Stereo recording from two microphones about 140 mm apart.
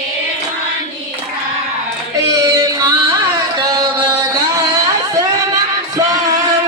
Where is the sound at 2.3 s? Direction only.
20° right (ahead or behind).